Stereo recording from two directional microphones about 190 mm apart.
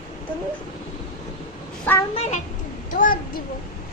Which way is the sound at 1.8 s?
10° left (ahead or behind).